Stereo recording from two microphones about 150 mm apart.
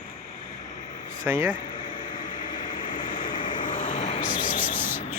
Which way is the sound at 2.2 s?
60° left (ahead or behind).